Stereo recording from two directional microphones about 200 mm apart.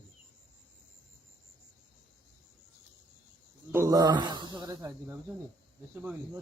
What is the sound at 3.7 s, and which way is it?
A man's voice, 15° right (ahead or behind).